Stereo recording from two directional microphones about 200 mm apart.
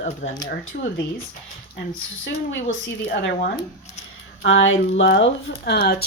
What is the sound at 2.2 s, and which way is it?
Speech, 70° left (ahead or behind).